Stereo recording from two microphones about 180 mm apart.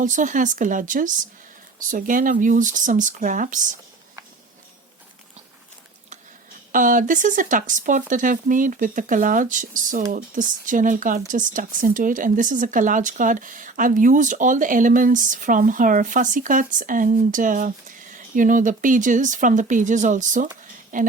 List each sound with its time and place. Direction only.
0.0 s speech: 45° right (ahead or behind)
6.7 s speech: 45° right (ahead or behind)